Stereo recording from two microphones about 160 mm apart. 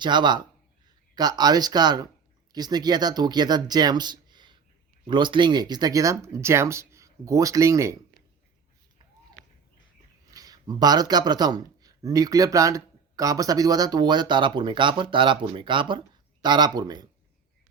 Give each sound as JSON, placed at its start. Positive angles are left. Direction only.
{"t": 0.0, "sound": "speech", "side_deg": -30}
{"t": 10.3, "sound": "speech", "side_deg": -25}